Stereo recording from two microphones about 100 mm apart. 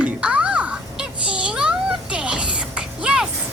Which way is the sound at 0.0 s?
15° right (ahead or behind).